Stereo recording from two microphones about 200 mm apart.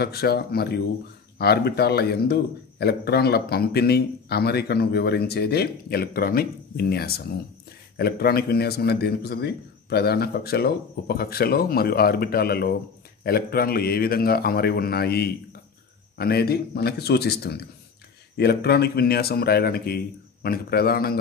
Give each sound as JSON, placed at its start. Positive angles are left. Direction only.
{"t": 0.0, "sound": "a man's voice", "side_deg": 50}